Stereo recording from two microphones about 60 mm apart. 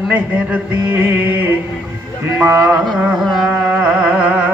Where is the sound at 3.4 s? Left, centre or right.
Right.